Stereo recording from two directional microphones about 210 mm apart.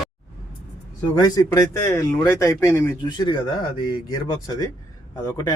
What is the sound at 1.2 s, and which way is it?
Speech, 20° left (ahead or behind).